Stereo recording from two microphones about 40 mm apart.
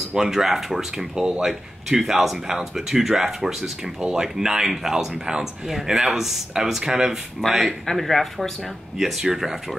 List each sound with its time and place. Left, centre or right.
0.2 s speech: centre
7.8 s speech: centre
8.9 s speech: centre